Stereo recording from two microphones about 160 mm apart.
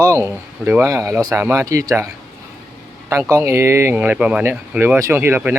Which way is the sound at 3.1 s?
15° right (ahead or behind).